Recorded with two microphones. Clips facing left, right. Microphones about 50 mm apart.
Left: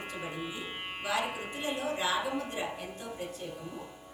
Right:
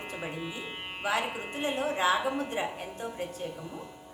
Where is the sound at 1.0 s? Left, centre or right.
Right.